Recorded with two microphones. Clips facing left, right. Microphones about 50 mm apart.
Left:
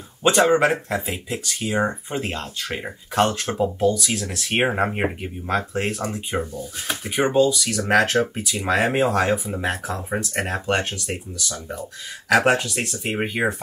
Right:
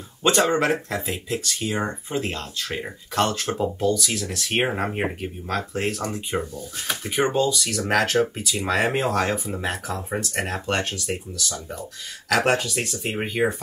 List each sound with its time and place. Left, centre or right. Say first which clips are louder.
0.2 s speech: left 3 dB; centre
2.7 s speech: left 2 dB; left
3.5 s speech: left 2 dB; centre